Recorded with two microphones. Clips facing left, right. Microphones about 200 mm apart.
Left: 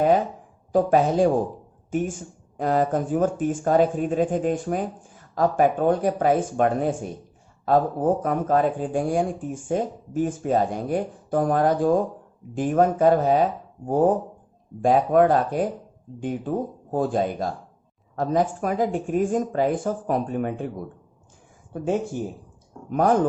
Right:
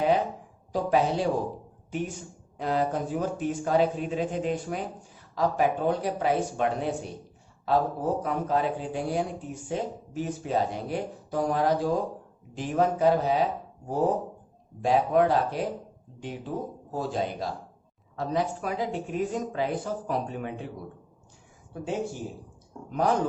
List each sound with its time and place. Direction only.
0.7 s speech: 50° left (ahead or behind)
22.9 s speech: 50° left (ahead or behind)